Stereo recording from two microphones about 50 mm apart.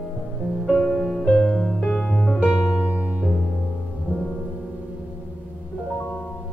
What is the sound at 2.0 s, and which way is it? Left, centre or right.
Music, centre.